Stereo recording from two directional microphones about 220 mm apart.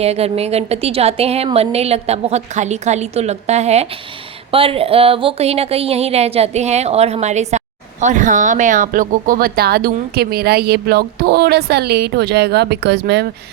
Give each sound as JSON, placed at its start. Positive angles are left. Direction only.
{"t": 0.0, "sound": "a woman's voice", "side_deg": -30}